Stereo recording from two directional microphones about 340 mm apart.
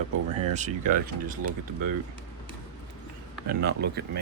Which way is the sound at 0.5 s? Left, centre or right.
Right.